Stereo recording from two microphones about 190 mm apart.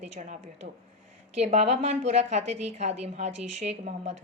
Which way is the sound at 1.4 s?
35° right (ahead or behind).